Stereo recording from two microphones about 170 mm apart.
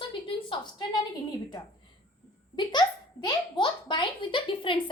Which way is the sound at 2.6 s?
25° left (ahead or behind).